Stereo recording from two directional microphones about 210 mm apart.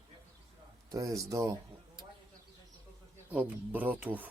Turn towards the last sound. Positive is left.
turn(degrees=-10)  # may be behind; listen again after turning